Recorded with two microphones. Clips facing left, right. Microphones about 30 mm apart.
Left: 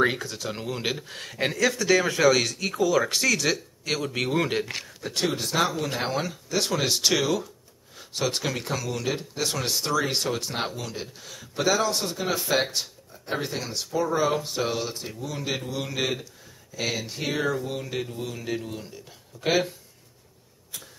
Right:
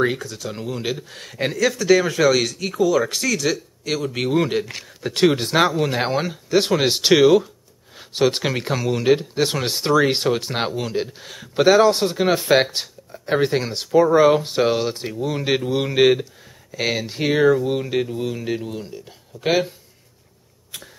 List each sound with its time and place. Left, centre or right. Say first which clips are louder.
0.0 s speech: right 2 dB; centre
4.1 s speech: right 6 dB; centre
5.1 s speech: right 9 dB; right
5.7 s speech: right 7 dB; centre
12.7 s a sound: right 3 dB; right
13.4 s speech: right 10 dB; right; by 19.6 s centre